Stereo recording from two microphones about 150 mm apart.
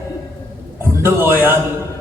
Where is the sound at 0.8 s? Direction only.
15° right (ahead or behind).